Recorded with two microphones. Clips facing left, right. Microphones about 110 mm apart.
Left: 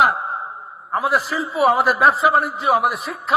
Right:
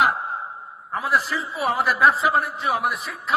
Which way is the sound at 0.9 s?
60° left (ahead or behind).